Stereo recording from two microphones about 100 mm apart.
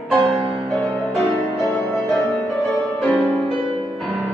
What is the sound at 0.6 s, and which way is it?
Music, centre (ahead or behind).